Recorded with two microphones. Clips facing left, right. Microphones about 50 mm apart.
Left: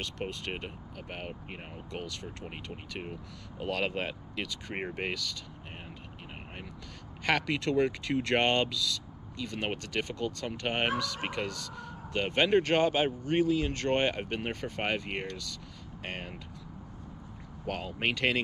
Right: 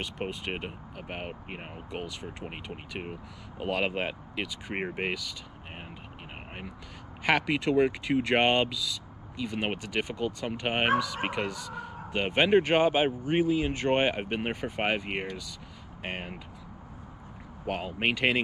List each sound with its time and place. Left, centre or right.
0.0 s speech: centre
7.2 s speech: centre
17.6 s speech: centre